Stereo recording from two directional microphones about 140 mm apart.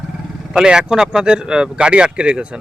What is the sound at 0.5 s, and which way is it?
Speech, 5° right (ahead or behind).